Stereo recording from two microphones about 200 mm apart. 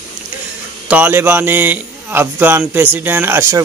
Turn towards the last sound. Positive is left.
turn(degrees=-10)  # may be behind; listen again after turning